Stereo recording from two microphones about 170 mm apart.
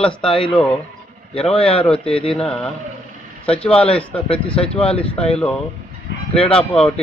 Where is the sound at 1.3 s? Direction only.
35° left (ahead or behind).